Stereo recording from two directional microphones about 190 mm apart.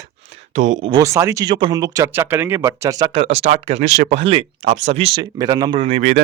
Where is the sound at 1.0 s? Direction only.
15° right (ahead or behind).